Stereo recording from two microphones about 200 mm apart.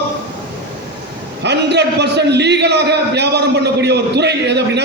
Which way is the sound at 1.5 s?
55° right (ahead or behind).